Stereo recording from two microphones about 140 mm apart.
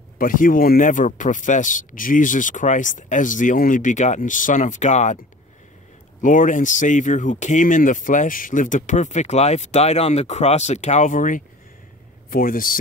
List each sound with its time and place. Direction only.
0.2 s speech: 80° left; by 5.2 s 60° left (ahead or behind)
6.2 s speech: 65° left (ahead or behind)
12.3 s speech: 90° left